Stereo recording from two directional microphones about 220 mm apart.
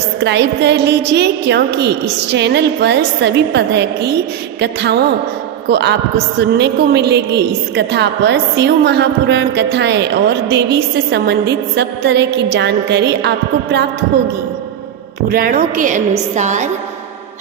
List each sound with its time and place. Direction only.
0.3 s a woman's voice: 50° right (ahead or behind)
15.3 s a woman's voice: 40° right (ahead or behind)